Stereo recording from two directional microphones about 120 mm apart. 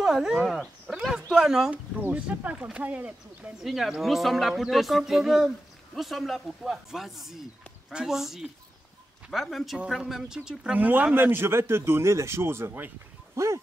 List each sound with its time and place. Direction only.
0.0 s speech: 5° right (ahead or behind)
0.8 s a sound: 5° right (ahead or behind)
2.0 s speech: 15° right (ahead or behind)